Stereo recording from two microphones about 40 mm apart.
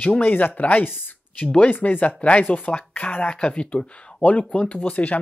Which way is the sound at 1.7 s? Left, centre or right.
Left.